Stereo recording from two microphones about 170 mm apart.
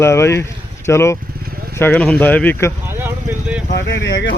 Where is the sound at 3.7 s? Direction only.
90° left.